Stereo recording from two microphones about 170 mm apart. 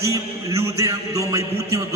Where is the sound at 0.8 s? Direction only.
20° right (ahead or behind).